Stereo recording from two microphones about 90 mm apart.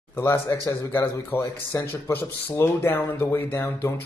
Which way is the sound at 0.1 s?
30° left (ahead or behind).